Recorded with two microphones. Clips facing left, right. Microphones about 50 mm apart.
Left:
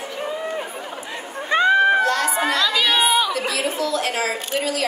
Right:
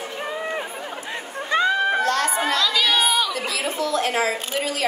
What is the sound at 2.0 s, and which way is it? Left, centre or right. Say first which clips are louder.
Crowd: left 1 dB; right.